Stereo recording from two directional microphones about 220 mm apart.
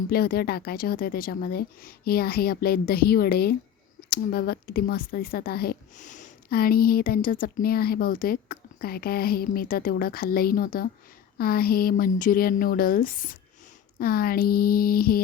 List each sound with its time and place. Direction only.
0.1 s speech: 45° left (ahead or behind)